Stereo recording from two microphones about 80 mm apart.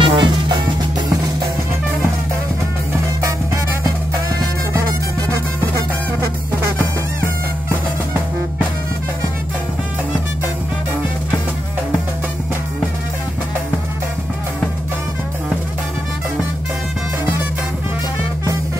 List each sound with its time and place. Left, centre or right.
0.0 s music: right